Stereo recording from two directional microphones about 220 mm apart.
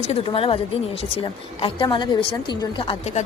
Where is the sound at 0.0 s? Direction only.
25° left (ahead or behind).